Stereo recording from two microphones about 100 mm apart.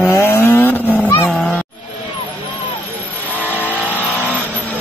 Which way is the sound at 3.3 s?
15° left (ahead or behind).